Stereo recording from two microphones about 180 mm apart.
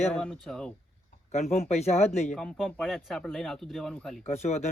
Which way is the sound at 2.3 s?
5° left (ahead or behind).